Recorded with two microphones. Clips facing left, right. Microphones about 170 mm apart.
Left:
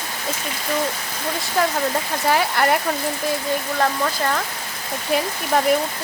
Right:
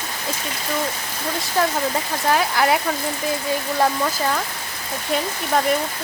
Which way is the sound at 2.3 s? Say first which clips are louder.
Even; centre (ahead or behind).